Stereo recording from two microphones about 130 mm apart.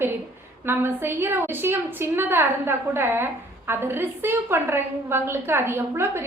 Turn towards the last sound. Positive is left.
turn(degrees=-20)  # may be behind; listen again after turning